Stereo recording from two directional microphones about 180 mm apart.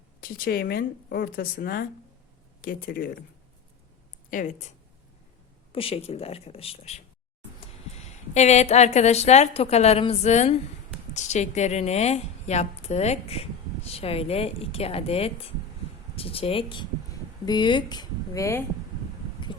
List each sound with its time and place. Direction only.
0.2 s speech: 55° left (ahead or behind)
4.3 s speech: 45° left (ahead or behind)
5.7 s a woman's voice: 30° left (ahead or behind); by 18.6 s 15° left (ahead or behind)